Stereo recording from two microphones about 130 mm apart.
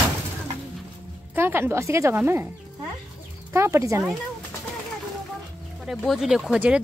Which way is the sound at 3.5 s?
20° right (ahead or behind).